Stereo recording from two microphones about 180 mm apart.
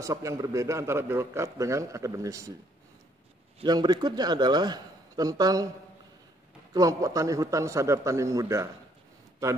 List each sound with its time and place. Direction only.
0.0 s a man's voice: 15° right (ahead or behind)
3.6 s a man's voice: 25° right (ahead or behind)
6.7 s a man's voice: 20° right (ahead or behind)